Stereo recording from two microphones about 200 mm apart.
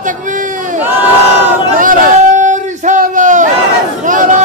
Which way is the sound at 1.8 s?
40° right (ahead or behind).